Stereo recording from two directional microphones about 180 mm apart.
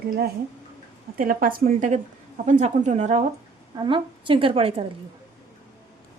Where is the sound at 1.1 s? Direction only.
50° right (ahead or behind).